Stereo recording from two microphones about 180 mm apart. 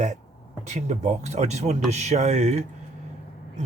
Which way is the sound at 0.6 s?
40° right (ahead or behind).